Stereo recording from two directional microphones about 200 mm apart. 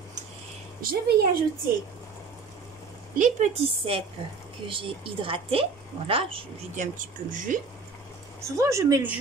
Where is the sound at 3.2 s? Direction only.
35° right (ahead or behind).